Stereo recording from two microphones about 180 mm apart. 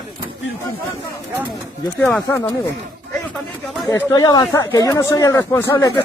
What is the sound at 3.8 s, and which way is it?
Speech, 20° left (ahead or behind).